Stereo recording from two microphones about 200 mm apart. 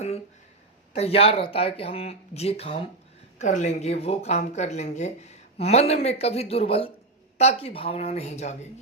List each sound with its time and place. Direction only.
0.9 s speech: 30° left (ahead or behind)